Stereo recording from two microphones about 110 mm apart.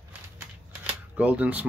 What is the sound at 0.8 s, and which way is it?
Camera, 10° right (ahead or behind).